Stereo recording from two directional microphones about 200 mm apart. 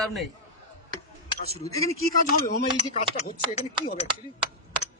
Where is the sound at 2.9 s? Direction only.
35° left (ahead or behind).